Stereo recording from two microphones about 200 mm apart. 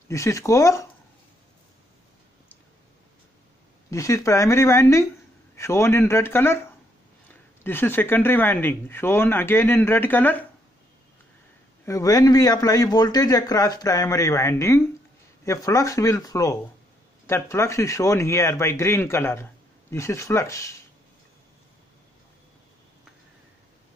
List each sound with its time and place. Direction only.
0.1 s a man's voice: 15° left (ahead or behind)
3.9 s a man's voice: 15° left (ahead or behind)
11.8 s a man's voice: 15° left (ahead or behind)